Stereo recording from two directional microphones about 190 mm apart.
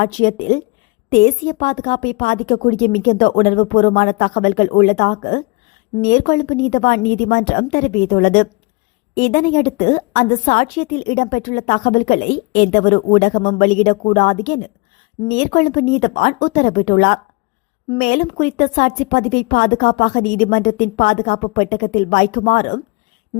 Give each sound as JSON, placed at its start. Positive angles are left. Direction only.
{"t": 0.0, "sound": "a woman's voice", "side_deg": 45}